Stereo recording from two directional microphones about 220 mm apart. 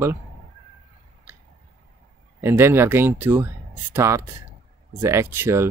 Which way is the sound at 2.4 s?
10° right (ahead or behind).